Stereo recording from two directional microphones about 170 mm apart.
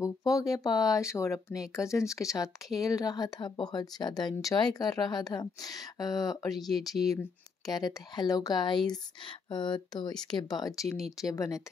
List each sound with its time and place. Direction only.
0.0 s speech: 20° left (ahead or behind)
6.5 s speech: centre (ahead or behind)
7.6 s speech: 25° left (ahead or behind)
10.9 s speech: centre (ahead or behind)
11.1 s speech: 20° left (ahead or behind)